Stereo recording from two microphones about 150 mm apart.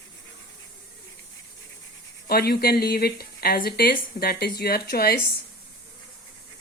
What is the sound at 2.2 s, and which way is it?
Speech, 90° left.